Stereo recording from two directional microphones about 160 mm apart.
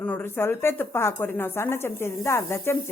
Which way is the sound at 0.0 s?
10° left (ahead or behind).